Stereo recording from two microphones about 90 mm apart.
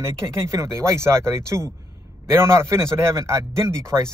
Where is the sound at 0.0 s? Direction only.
30° right (ahead or behind).